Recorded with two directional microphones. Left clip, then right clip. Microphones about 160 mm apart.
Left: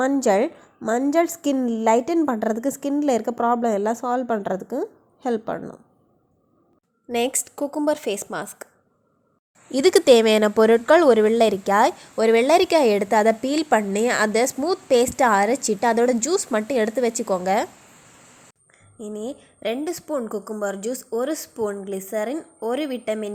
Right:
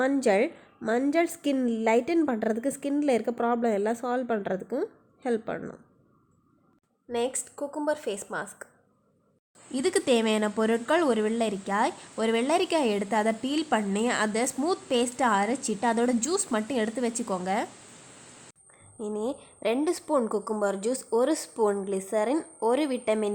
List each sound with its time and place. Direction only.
0.2 s a woman's voice: 10° left (ahead or behind)
0.8 s a woman's voice: centre (ahead or behind)
1.1 s a woman's voice: 10° left (ahead or behind)
7.1 s a woman's voice: 35° left (ahead or behind)
9.7 s speech: 30° left (ahead or behind)
18.7 s a woman's voice: centre (ahead or behind)